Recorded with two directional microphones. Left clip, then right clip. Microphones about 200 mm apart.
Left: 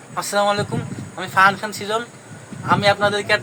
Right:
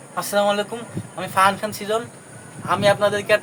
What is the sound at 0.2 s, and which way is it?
Speech, 5° right (ahead or behind).